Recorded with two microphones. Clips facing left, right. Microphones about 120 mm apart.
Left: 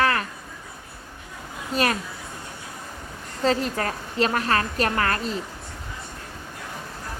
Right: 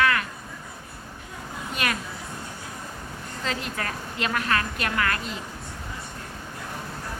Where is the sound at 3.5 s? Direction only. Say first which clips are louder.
Left 8 dB; 35° left (ahead or behind).